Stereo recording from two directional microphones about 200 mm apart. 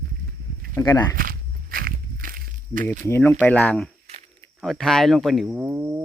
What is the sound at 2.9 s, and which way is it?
Speech, 10° left (ahead or behind).